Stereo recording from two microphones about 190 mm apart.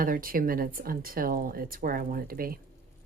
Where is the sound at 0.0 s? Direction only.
45° right (ahead or behind).